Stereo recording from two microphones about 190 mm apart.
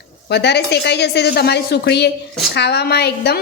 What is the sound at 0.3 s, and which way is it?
A woman's voice, 60° left (ahead or behind).